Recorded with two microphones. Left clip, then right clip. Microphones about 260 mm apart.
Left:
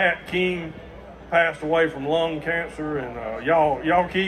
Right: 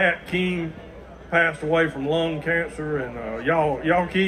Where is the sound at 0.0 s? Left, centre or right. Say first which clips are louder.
Even; left.